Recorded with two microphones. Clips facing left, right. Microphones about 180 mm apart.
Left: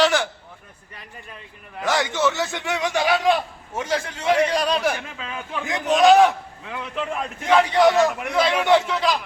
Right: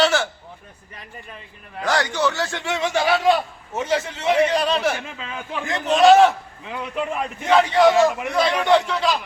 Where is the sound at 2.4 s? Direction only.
Centre (ahead or behind).